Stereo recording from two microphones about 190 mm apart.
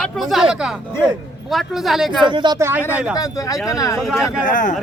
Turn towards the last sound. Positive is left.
turn(degrees=45)  # may be behind; listen again after turning